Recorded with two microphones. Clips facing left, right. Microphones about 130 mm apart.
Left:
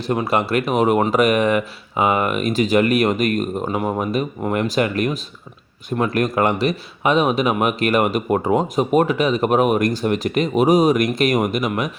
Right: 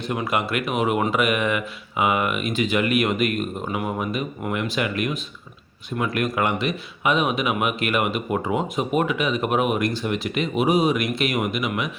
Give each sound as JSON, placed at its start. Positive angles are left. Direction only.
{"t": 0.0, "sound": "speech", "side_deg": 35}